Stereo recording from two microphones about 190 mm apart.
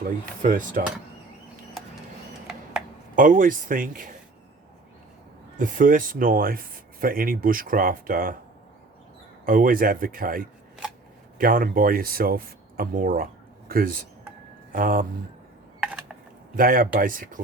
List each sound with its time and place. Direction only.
0.0 s speech: 45° right (ahead or behind)
3.2 s speech: 45° right (ahead or behind)
5.5 s speech: 45° right (ahead or behind)
9.5 s speech: 45° right (ahead or behind)
15.8 s a sound: 5° right (ahead or behind)
16.6 s speech: 45° right (ahead or behind)